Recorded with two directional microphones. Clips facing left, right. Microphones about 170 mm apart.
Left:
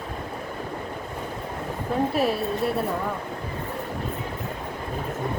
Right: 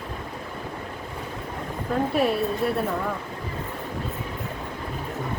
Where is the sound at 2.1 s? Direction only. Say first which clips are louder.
Right 1 dB; centre (ahead or behind).